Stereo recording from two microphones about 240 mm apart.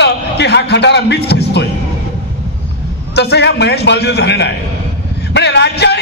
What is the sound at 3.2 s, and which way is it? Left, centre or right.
A man's voice, left.